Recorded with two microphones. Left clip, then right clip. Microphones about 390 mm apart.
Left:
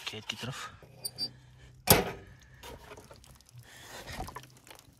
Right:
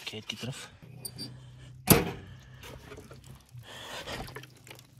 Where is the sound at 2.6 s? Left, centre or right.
Left.